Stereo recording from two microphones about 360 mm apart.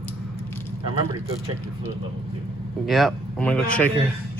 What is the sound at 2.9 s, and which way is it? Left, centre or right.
A man's voice, centre.